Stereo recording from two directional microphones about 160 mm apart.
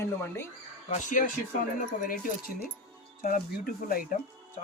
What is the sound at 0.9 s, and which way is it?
Speech, 50° left (ahead or behind).